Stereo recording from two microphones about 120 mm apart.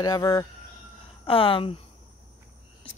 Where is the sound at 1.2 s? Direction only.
50° left (ahead or behind).